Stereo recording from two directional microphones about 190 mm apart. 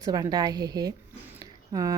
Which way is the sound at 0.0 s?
20° right (ahead or behind).